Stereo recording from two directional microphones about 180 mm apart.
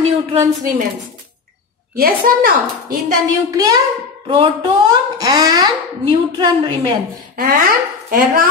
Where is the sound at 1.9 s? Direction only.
55° right (ahead or behind).